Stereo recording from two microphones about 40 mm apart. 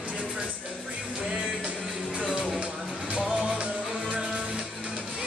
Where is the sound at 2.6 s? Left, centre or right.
Right.